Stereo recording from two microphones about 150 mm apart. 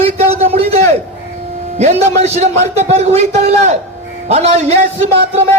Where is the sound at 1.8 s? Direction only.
45° right (ahead or behind).